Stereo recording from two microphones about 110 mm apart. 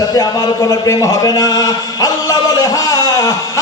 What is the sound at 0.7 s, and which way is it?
A man's voice, 30° left (ahead or behind).